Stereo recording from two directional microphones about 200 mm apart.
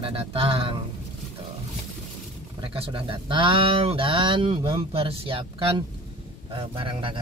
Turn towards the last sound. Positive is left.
turn(degrees=-25)  # may be behind; listen again after turning